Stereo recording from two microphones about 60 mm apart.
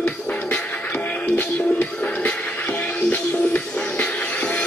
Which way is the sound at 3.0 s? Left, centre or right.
Left.